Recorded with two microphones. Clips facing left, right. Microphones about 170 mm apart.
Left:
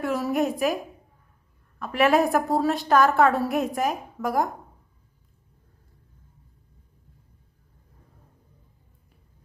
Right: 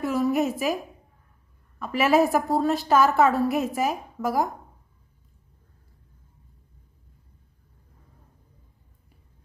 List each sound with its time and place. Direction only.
0.0 s a woman's voice: centre (ahead or behind)
1.8 s a woman's voice: centre (ahead or behind)